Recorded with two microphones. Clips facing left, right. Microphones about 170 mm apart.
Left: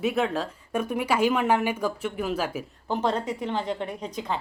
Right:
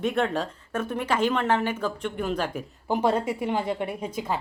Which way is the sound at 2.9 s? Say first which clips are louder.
Right 3 dB; 10° right (ahead or behind).